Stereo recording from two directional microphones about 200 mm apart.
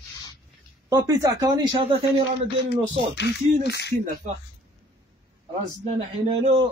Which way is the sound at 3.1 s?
60° left (ahead or behind).